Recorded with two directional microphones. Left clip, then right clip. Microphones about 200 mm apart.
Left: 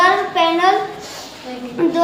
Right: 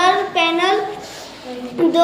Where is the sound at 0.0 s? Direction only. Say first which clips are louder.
Left 1 dB; 10° left (ahead or behind).